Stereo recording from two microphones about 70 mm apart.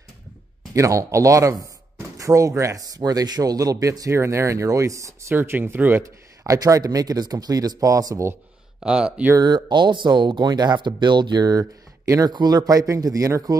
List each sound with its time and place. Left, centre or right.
0.7 s speech: right
4.1 s speech: right
5.3 s speech: right
6.4 s speech: right
8.8 s speech: centre
9.4 s speech: right